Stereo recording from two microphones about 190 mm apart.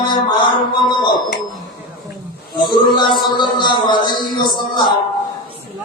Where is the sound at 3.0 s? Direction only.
20° left (ahead or behind).